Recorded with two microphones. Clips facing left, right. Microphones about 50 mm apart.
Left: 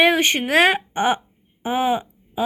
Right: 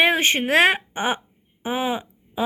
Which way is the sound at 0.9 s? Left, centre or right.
Centre.